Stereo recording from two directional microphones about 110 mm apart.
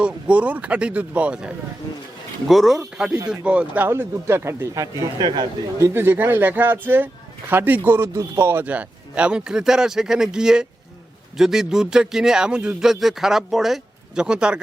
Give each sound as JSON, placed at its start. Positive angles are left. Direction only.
{"t": 0.0, "sound": "speech", "side_deg": -10}
{"t": 3.8, "sound": "speech", "side_deg": -25}
{"t": 5.8, "sound": "speech", "side_deg": -20}